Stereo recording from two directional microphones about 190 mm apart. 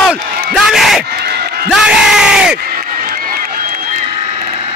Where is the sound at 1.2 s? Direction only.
60° right (ahead or behind).